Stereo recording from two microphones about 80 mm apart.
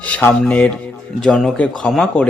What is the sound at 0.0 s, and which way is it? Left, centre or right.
Speech, left.